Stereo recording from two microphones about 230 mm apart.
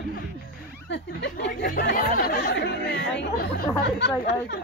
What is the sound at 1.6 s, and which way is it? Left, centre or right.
Speech, left.